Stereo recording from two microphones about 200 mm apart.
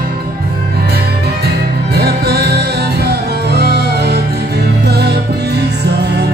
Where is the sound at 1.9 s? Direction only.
50° right (ahead or behind).